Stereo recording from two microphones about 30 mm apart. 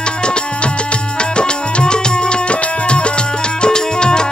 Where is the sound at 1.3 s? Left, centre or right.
Left.